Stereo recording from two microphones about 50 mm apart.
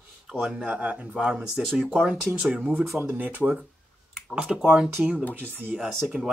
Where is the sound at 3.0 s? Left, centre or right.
Right.